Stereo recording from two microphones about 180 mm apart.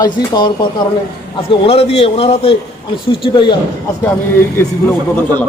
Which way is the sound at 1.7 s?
35° left (ahead or behind).